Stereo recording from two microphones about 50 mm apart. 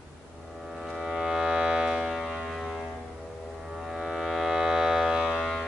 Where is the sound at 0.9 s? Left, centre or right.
Centre.